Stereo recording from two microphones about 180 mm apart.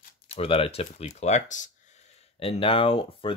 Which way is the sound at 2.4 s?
30° left (ahead or behind).